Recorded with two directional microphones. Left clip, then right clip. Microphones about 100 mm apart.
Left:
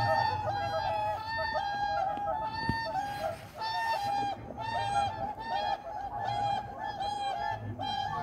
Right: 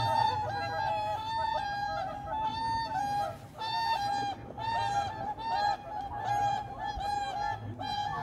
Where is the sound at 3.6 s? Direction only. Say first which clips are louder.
Right 1 dB; 30° right (ahead or behind).